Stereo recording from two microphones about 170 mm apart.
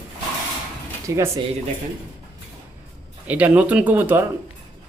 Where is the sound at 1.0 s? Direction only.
20° right (ahead or behind).